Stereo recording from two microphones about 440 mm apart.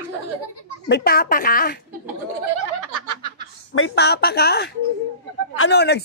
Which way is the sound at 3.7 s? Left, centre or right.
Left.